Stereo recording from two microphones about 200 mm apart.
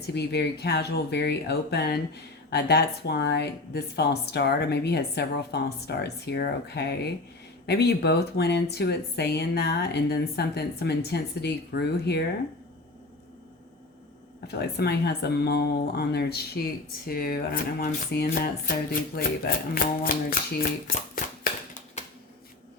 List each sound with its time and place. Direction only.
0.1 s speech: 55° left (ahead or behind)
14.4 s speech: 55° left (ahead or behind)